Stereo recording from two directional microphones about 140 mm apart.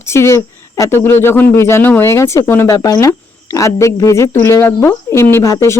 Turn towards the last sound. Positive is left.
turn(degrees=20)  # may be behind; listen again after turning